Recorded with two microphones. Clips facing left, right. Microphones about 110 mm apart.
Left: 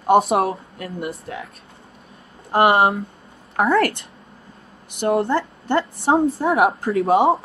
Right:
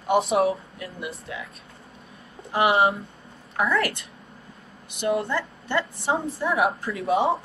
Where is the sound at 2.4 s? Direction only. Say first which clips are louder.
Left 5 dB; 60° left (ahead or behind).